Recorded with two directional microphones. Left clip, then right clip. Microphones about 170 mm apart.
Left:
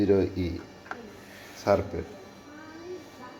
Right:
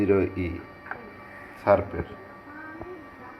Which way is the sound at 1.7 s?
25° left (ahead or behind).